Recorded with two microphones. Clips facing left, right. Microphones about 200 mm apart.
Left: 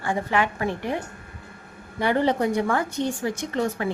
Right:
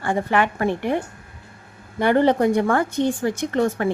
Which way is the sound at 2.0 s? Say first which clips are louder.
Right 5 dB; 55° right (ahead or behind).